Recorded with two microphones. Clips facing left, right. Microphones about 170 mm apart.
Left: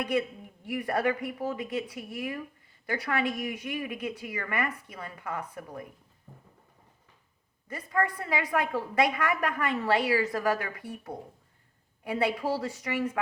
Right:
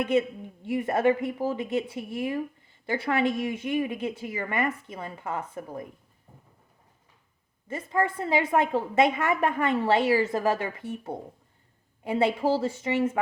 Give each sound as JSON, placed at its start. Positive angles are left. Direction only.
{"t": 0.0, "sound": "a woman's voice", "side_deg": -25}
{"t": 7.7, "sound": "a woman's voice", "side_deg": -25}